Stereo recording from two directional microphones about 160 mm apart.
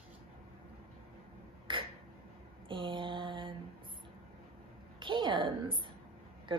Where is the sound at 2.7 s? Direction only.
30° right (ahead or behind).